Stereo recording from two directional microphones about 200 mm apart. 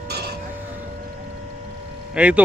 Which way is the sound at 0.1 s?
55° right (ahead or behind).